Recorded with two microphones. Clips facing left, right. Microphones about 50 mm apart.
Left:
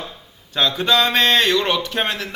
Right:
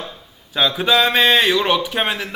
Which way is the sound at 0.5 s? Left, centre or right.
Centre.